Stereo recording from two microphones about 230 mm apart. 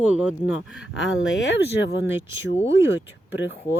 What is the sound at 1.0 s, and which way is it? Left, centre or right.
Speech, left.